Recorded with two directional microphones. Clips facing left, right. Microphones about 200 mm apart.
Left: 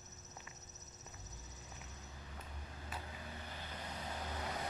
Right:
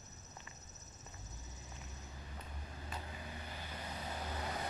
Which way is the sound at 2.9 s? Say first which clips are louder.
Right 1 dB; 5° left (ahead or behind).